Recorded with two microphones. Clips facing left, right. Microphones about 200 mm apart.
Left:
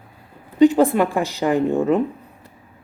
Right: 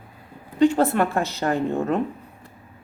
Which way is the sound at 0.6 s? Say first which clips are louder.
Left 4 dB; 15° left (ahead or behind).